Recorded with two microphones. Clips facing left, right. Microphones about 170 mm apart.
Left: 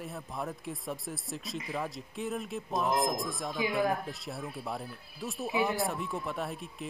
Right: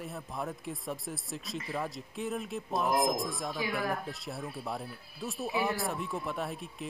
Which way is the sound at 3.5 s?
20° left (ahead or behind).